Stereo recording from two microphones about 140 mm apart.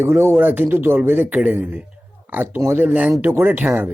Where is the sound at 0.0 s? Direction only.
15° right (ahead or behind).